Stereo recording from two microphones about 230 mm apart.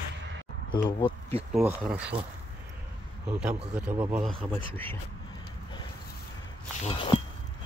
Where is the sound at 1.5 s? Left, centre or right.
Centre.